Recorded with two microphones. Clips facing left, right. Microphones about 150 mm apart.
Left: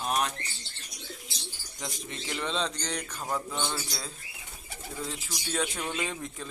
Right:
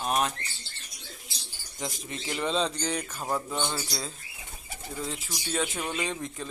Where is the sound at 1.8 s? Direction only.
5° right (ahead or behind).